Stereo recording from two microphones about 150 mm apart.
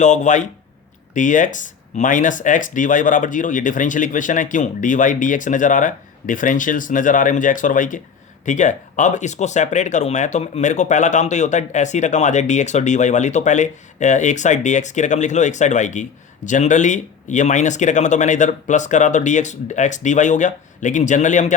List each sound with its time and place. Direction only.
0.0 s speech: 50° left (ahead or behind)